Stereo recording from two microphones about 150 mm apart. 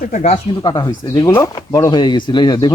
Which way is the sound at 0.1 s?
50° left (ahead or behind).